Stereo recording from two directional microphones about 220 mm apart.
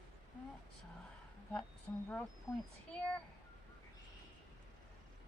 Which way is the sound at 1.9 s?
10° left (ahead or behind).